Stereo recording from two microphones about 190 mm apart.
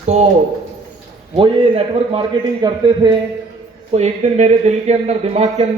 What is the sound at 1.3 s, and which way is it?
A man's voice, 25° right (ahead or behind).